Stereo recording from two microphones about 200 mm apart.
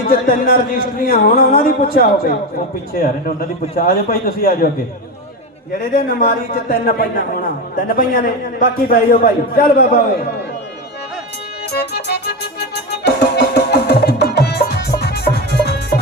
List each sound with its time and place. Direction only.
0.1 s a man's voice: 45° left (ahead or behind)
5.9 s a man's voice: 40° left (ahead or behind)
11.7 s music: 55° left (ahead or behind)